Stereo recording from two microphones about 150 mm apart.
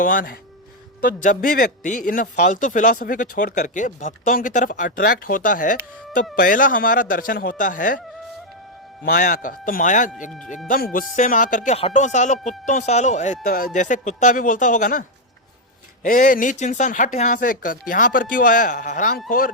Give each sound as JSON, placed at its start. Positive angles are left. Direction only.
{"t": 0.0, "sound": "a man's voice", "side_deg": 65}
{"t": 9.0, "sound": "a man's voice", "side_deg": 60}
{"t": 10.7, "sound": "speech", "side_deg": 75}
{"t": 11.1, "sound": "a man's voice", "side_deg": 60}
{"t": 11.8, "sound": "speech", "side_deg": 45}
{"t": 13.4, "sound": "speech", "side_deg": 80}
{"t": 13.7, "sound": "a man's voice", "side_deg": 55}
{"t": 16.0, "sound": "a man's voice", "side_deg": 65}